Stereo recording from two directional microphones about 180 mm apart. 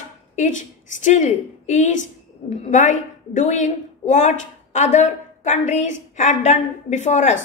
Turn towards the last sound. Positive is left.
turn(degrees=40)  # may be behind; listen again after turning